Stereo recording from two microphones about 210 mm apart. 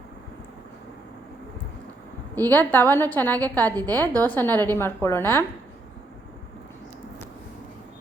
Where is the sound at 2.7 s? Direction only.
10° left (ahead or behind).